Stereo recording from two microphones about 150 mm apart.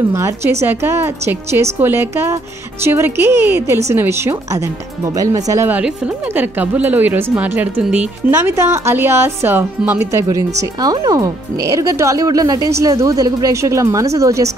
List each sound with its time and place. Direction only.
0.1 s a woman's voice: 20° right (ahead or behind)
5.7 s a woman's voice: 10° right (ahead or behind)